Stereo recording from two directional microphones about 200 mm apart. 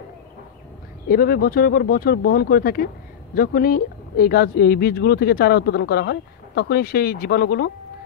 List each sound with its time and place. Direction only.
1.0 s speech: 50° left (ahead or behind)